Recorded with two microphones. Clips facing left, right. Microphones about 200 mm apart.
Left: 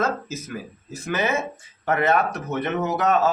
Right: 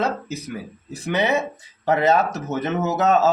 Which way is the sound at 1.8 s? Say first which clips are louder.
Right 3 dB; 20° right (ahead or behind).